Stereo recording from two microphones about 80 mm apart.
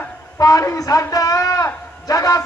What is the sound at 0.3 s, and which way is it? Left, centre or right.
A man's voice, left.